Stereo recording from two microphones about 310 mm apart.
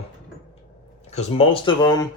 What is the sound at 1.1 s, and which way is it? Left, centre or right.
Speech, centre.